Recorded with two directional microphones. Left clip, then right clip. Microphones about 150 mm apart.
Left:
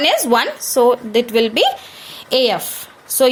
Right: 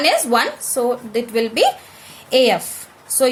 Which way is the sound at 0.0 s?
40° left (ahead or behind).